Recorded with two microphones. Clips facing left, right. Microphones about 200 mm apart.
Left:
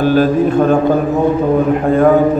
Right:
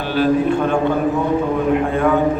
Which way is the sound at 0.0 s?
45° left (ahead or behind).